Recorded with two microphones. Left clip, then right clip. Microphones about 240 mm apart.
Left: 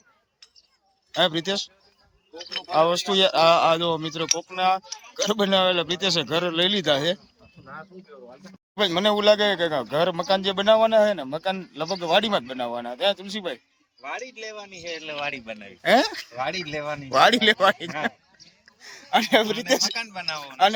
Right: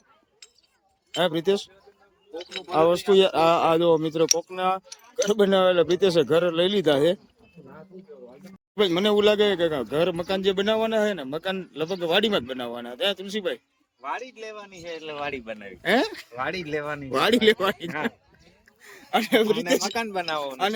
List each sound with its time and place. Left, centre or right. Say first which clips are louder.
1.1 s speech: even; centre
8.7 s speech: even; centre
20.0 s speech: right 3 dB; right